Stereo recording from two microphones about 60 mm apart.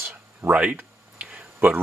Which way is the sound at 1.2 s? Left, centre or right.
Centre.